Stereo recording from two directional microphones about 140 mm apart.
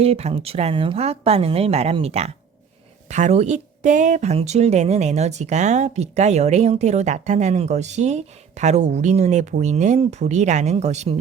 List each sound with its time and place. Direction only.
0.0 s a woman's voice: 45° right (ahead or behind)